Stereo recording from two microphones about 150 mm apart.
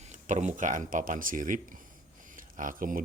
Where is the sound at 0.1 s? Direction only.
50° right (ahead or behind).